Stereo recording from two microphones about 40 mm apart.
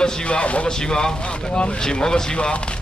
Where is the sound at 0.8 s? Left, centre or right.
Centre.